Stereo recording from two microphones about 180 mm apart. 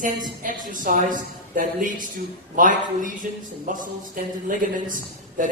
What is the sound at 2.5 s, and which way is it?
A man's voice, 45° right (ahead or behind).